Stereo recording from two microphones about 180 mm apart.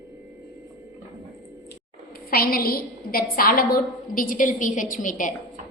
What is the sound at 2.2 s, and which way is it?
A woman's voice, 55° left (ahead or behind).